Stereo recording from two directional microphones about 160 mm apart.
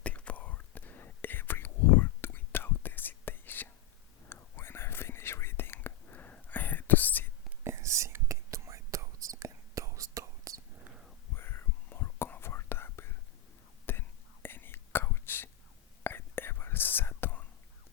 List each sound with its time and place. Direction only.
0.0 s whispering: 10° left (ahead or behind)
7.6 s whispering: 15° right (ahead or behind)
11.3 s whispering: 15° left (ahead or behind)